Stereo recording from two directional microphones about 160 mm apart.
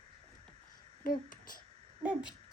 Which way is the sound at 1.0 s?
60° left (ahead or behind).